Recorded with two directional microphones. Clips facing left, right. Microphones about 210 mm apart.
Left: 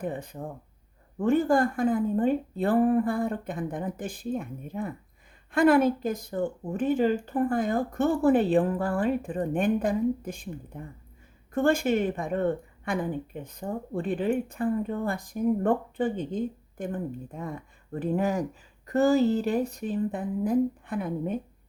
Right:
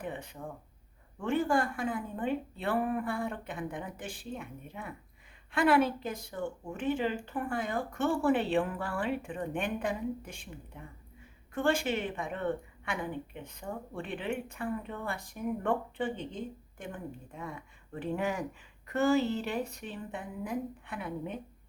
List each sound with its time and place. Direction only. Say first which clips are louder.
0.0 s speech: left 6 dB; 40° left (ahead or behind)